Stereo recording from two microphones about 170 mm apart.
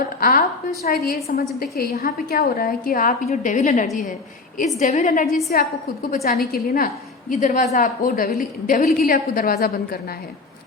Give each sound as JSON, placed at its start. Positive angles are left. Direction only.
{"t": 0.0, "sound": "a sound", "side_deg": 55}
{"t": 0.9, "sound": "a woman's voice", "side_deg": 60}
{"t": 5.5, "sound": "a woman's voice", "side_deg": 60}